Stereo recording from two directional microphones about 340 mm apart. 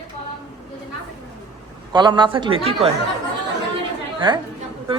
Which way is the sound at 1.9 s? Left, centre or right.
Centre.